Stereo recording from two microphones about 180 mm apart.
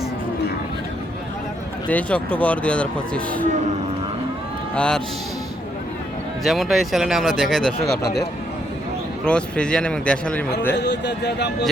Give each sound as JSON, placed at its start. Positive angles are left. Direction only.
{"t": 1.9, "sound": "speech", "side_deg": 5}
{"t": 4.7, "sound": "a man's voice", "side_deg": 5}
{"t": 6.4, "sound": "a man's voice", "side_deg": 0}
{"t": 8.0, "sound": "speech", "side_deg": 60}
{"t": 9.2, "sound": "a man's voice", "side_deg": 5}
{"t": 10.8, "sound": "speech", "side_deg": 70}